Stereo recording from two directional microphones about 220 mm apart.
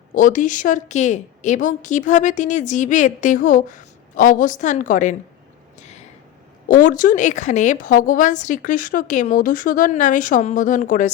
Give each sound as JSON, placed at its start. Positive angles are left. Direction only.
{"t": 0.1, "sound": "a woman's voice", "side_deg": 35}
{"t": 6.7, "sound": "a woman's voice", "side_deg": 35}